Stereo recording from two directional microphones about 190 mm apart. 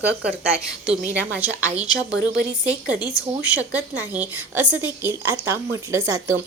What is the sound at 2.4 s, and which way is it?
Speech, 40° right (ahead or behind).